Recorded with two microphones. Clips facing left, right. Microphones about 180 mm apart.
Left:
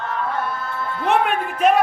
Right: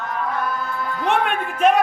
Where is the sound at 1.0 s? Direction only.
5° left (ahead or behind).